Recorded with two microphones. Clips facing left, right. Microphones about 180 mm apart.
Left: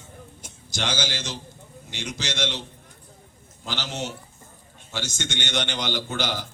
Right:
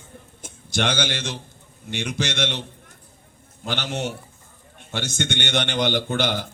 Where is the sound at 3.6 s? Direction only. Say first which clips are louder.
Right 4 dB; 60° right (ahead or behind).